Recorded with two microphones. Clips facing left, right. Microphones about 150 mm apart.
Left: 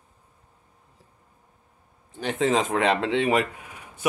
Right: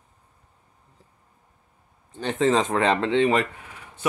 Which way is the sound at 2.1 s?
5° left (ahead or behind).